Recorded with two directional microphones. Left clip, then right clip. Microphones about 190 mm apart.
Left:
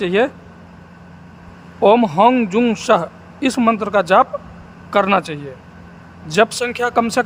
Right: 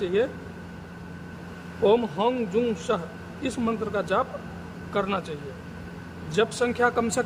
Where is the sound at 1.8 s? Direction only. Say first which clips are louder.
Left 10 dB; 50° left (ahead or behind).